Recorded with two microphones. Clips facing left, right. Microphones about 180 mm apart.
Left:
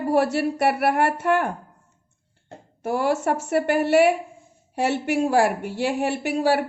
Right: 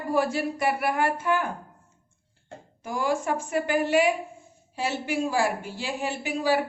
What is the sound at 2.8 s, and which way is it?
A woman's voice, 65° left (ahead or behind).